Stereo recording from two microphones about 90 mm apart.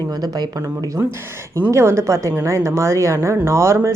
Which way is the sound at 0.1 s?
50° right (ahead or behind).